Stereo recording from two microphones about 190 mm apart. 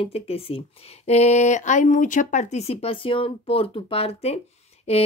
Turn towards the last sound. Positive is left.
turn(degrees=30)  # may be behind; listen again after turning